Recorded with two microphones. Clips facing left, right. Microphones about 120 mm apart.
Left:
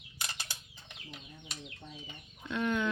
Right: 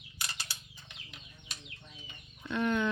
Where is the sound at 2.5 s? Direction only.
5° left (ahead or behind).